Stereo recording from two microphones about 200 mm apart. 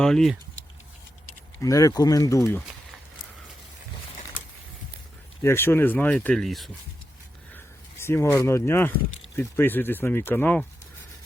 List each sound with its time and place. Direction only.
0.0 s speech: centre (ahead or behind)
1.6 s speech: 15° left (ahead or behind)
5.4 s speech: 10° left (ahead or behind)
7.5 s speech: 10° left (ahead or behind)